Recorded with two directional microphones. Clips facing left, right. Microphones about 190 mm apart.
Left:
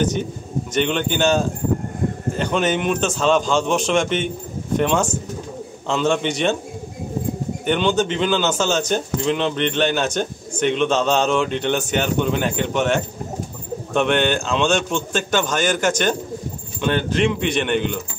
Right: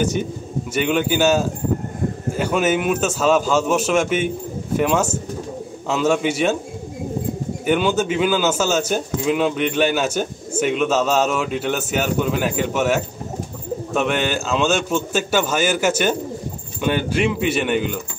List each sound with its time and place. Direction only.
0.7 s speech: 5° right (ahead or behind)
7.6 s a man's voice: 5° right (ahead or behind)